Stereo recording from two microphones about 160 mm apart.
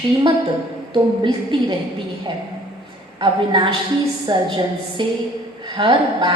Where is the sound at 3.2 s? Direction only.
30° right (ahead or behind).